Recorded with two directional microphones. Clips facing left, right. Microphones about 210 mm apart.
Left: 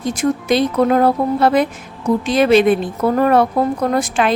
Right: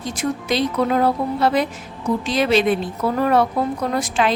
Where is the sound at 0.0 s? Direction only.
50° left (ahead or behind).